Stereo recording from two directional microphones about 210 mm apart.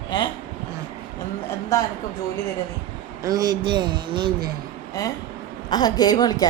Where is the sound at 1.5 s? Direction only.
15° left (ahead or behind).